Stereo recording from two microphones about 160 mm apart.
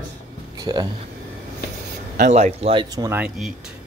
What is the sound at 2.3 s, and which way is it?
Speech, 40° right (ahead or behind).